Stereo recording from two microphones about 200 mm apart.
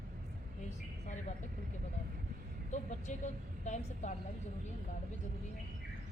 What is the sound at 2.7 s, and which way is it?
A woman's voice, 35° left (ahead or behind).